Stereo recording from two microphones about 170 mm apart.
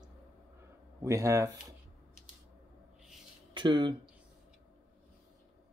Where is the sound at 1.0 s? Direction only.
20° right (ahead or behind).